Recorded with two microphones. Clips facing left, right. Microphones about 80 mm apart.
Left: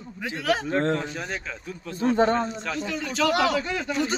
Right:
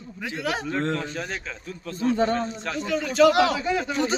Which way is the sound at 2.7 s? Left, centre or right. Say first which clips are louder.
Right 3 dB; centre.